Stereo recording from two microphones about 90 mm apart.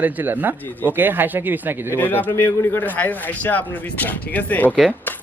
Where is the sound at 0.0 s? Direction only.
20° right (ahead or behind).